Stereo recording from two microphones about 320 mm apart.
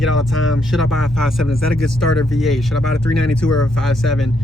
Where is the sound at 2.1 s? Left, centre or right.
Centre.